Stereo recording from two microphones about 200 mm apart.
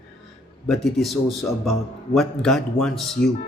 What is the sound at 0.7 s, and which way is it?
Speech, centre (ahead or behind).